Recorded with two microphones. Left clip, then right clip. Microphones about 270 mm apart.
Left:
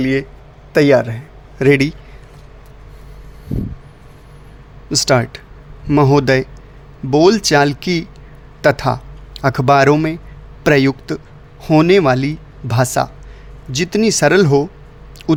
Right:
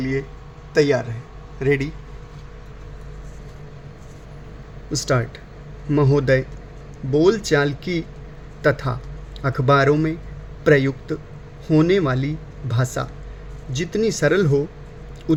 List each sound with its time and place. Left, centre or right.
0.0 s a man's voice: left
4.9 s a man's voice: left